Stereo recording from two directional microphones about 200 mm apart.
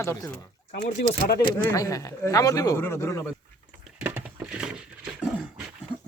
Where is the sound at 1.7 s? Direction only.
15° left (ahead or behind).